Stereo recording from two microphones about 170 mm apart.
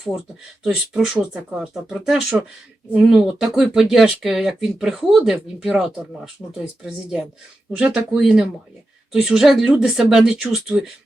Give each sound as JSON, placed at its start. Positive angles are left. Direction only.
{"t": 0.6, "sound": "speech", "side_deg": -5}